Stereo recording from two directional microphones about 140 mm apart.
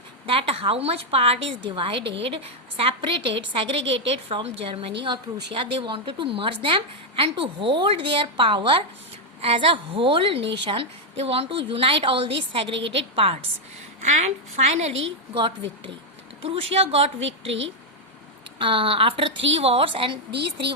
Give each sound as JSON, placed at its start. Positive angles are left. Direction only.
{"t": 0.3, "sound": "a woman's voice", "side_deg": -40}
{"t": 14.0, "sound": "a woman's voice", "side_deg": -55}
{"t": 15.4, "sound": "a woman's voice", "side_deg": -35}
{"t": 18.6, "sound": "a woman's voice", "side_deg": -40}